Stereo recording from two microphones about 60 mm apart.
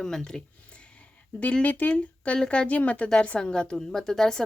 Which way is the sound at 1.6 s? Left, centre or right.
Left.